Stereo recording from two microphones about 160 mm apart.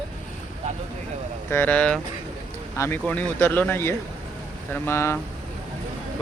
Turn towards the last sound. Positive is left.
turn(degrees=15)  # may be behind; listen again after turning